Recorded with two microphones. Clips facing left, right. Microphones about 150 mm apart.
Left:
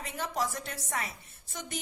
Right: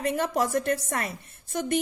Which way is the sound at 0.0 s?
55° right (ahead or behind).